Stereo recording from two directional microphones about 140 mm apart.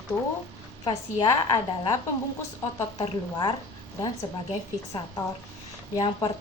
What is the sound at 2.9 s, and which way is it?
Speech, 35° left (ahead or behind).